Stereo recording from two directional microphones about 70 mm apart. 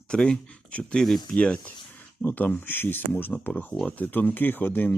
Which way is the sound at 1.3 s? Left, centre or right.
Centre.